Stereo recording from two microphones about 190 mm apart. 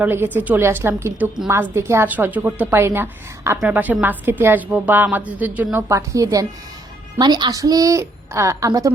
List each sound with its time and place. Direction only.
0.0 s a woman's voice: 10° right (ahead or behind)